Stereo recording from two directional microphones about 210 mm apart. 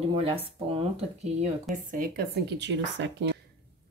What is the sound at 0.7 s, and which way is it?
Speech, 30° right (ahead or behind).